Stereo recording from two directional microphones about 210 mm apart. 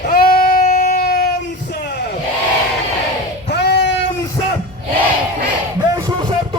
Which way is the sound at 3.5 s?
55° left (ahead or behind).